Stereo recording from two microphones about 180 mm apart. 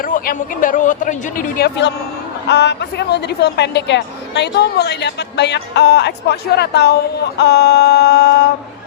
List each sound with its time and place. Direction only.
0.0 s speech: 50° left (ahead or behind)
2.5 s a woman's voice: 70° left (ahead or behind)